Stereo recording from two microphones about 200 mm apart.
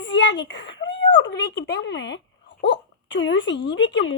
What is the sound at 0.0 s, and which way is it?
Speech, 65° left (ahead or behind).